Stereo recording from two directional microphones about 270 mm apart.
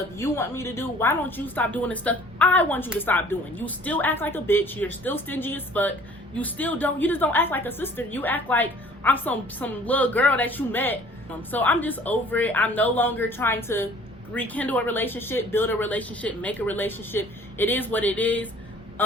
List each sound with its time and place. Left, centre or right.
0.2 s a woman's voice: centre